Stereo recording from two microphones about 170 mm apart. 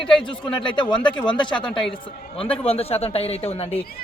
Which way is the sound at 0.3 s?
30° left (ahead or behind).